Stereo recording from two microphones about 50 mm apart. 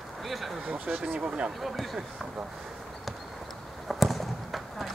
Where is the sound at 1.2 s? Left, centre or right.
Right.